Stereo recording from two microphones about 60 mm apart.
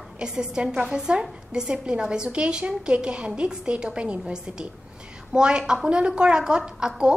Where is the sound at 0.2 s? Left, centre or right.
Centre.